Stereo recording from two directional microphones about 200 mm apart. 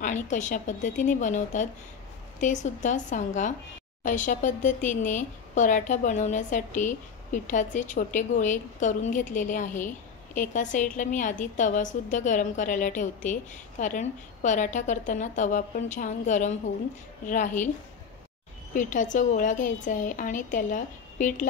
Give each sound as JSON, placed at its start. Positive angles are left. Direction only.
{"t": 0.0, "sound": "a woman's voice", "side_deg": 40}
{"t": 18.7, "sound": "a woman's voice", "side_deg": 40}